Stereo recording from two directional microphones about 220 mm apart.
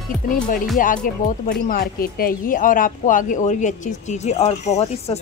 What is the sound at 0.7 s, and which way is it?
Speech, 40° left (ahead or behind).